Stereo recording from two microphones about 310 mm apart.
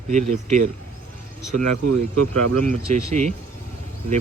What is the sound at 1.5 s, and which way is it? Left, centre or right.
Speech, right.